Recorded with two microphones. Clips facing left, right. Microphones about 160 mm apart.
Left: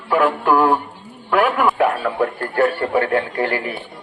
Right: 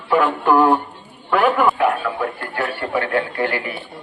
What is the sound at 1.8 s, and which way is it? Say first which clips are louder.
A man's voice: left 2 dB; 40° left (ahead or behind).